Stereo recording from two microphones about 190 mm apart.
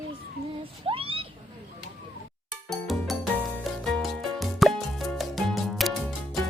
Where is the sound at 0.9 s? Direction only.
30° right (ahead or behind).